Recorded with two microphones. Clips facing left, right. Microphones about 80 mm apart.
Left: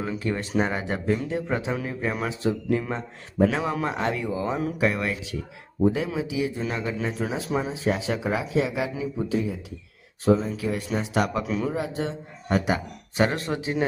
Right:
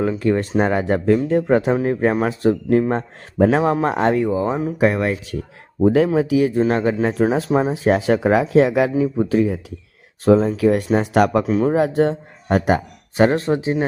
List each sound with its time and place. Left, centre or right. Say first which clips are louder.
0.2 s speech: right 8 dB; right
4.5 s speech: right 5 dB; right
4.8 s a man's voice: right 10 dB; right
5.8 s speech: right 9 dB; right
9.4 s speech: right 10 dB; right
11.4 s a man's voice: right 9 dB; right
11.7 s a man's voice: right 12 dB; right